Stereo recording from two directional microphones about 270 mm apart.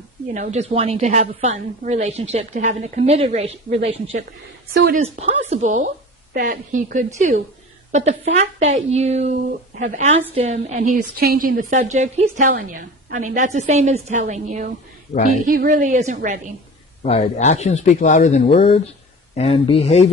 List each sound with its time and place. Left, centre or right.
0.3 s a woman's voice: right
17.0 s speech: left